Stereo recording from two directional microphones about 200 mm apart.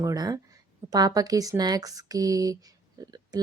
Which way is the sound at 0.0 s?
20° right (ahead or behind).